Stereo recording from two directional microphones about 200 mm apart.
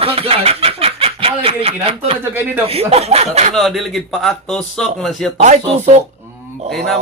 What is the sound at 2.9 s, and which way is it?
Speech, 30° right (ahead or behind).